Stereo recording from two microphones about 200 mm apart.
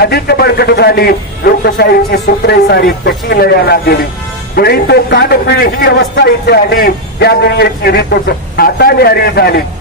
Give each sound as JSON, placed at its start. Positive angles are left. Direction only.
{"t": 0.0, "sound": "a man's voice", "side_deg": 55}